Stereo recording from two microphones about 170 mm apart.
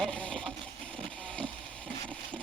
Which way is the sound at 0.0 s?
5° left (ahead or behind).